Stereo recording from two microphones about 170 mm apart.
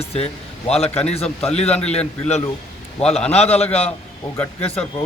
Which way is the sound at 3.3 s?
40° left (ahead or behind).